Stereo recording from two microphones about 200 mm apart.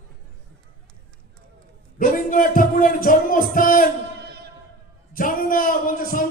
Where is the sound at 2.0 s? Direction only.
45° left (ahead or behind).